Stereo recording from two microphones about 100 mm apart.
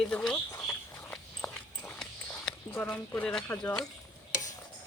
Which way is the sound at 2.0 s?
10° left (ahead or behind).